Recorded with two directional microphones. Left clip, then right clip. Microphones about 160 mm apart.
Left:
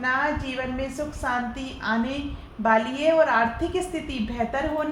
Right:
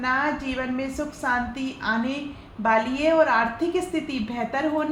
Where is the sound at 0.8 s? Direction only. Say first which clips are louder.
Even; 45° right (ahead or behind).